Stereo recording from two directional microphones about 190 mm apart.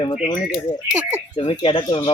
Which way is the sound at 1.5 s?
25° left (ahead or behind).